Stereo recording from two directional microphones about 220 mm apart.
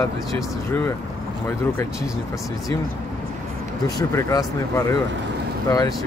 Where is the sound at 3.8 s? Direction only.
15° left (ahead or behind).